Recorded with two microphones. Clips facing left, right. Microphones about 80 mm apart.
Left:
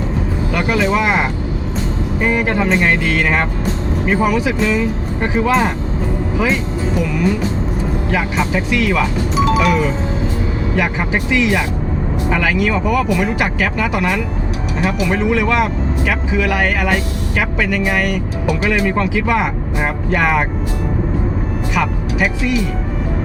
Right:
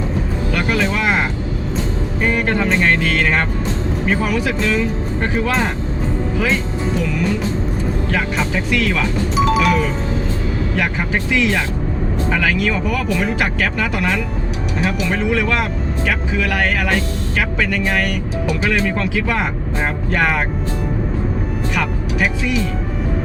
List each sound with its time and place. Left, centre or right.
0.5 s speech: centre
2.2 s speech: centre
6.9 s speech: centre
21.8 s speech: centre